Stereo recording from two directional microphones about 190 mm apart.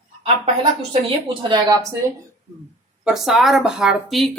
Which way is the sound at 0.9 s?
25° right (ahead or behind).